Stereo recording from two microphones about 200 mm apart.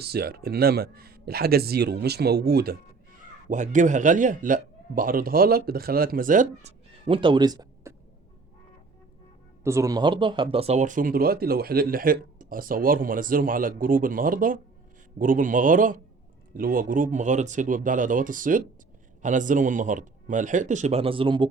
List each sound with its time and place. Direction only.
0.0 s speech: 55° right (ahead or behind)
3.5 s a man's voice: 40° right (ahead or behind); by 7.9 s 20° right (ahead or behind)
9.6 s a man's voice: 15° right (ahead or behind)